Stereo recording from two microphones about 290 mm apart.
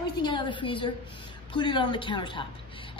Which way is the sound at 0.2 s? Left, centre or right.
Centre.